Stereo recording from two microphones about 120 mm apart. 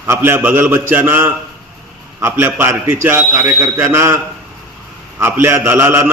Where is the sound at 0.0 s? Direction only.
20° right (ahead or behind).